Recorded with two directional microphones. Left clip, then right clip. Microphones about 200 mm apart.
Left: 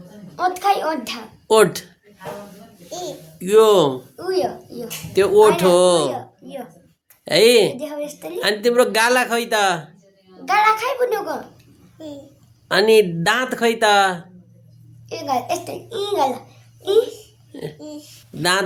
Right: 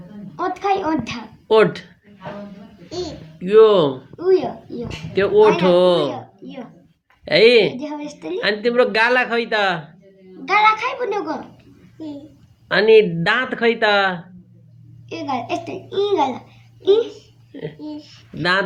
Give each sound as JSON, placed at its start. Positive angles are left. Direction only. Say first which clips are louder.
{"t": 0.3, "sound": "a child's voice", "louder": "left 2 dB", "side_deg": 15}
{"t": 1.5, "sound": "speech", "louder": "even", "side_deg": 35}
{"t": 3.3, "sound": "speech", "louder": "right 1 dB", "side_deg": 40}
{"t": 4.2, "sound": "a child's voice", "louder": "right 5 dB", "side_deg": 15}
{"t": 5.1, "sound": "speech", "louder": "left 1 dB", "side_deg": 35}
{"t": 6.1, "sound": "a sound", "louder": "left 2 dB", "side_deg": 10}
{"t": 7.3, "sound": "speech", "louder": "right 1 dB", "side_deg": 30}
{"t": 7.8, "sound": "a child's voice", "louder": "left 2 dB", "side_deg": 10}
{"t": 8.4, "sound": "speech", "louder": "left 1 dB", "side_deg": 35}
{"t": 10.4, "sound": "a child's voice", "louder": "right 1 dB", "side_deg": 15}
{"t": 12.6, "sound": "speech", "louder": "right 2 dB", "side_deg": 35}
{"t": 15.1, "sound": "a child's voice", "louder": "left 2 dB", "side_deg": 10}
{"t": 17.5, "sound": "speech", "louder": "even", "side_deg": 35}